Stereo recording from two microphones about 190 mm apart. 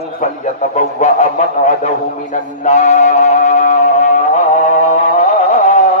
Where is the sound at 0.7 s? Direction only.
40° left (ahead or behind).